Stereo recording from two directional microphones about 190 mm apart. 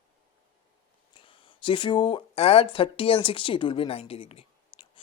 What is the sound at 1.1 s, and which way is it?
Speech, 25° left (ahead or behind).